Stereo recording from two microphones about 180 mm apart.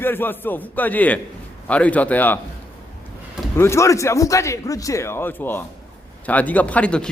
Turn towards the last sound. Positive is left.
turn(degrees=5)  # may be behind; listen again after turning